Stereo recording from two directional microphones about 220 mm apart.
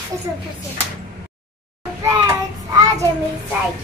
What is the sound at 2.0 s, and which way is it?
Hands, 15° right (ahead or behind).